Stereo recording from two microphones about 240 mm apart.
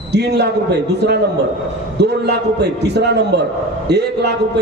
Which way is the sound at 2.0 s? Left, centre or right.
Right.